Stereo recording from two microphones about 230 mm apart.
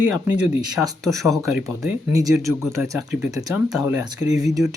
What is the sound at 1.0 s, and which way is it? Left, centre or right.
Speech, centre.